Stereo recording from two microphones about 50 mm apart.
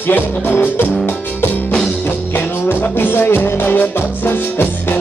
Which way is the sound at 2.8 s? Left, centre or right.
Left.